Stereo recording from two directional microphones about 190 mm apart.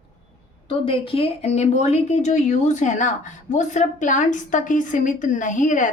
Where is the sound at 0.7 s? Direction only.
30° left (ahead or behind).